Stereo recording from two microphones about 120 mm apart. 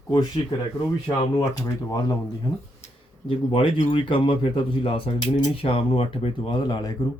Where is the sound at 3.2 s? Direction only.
45° left (ahead or behind).